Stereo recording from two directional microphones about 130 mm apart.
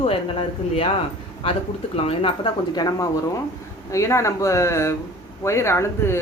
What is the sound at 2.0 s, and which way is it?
Speech, 45° left (ahead or behind).